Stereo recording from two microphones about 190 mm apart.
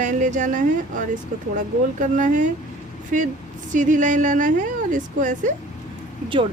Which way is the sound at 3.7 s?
40° right (ahead or behind).